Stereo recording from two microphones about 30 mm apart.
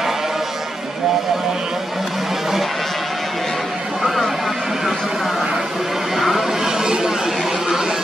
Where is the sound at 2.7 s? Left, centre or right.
Centre.